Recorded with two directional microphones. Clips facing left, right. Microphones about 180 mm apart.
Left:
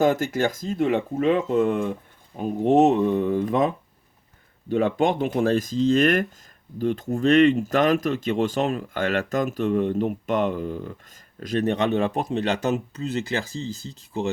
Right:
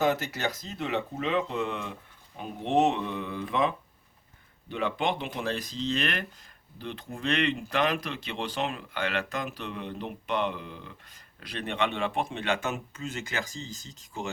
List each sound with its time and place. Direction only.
0.0 s speech: 50° left (ahead or behind)